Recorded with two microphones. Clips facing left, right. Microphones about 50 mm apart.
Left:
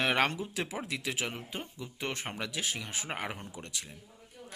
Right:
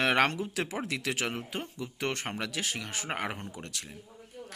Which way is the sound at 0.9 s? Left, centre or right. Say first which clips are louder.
Right 3 dB; right.